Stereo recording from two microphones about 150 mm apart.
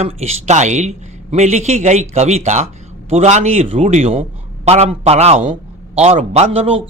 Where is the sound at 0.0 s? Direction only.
45° right (ahead or behind).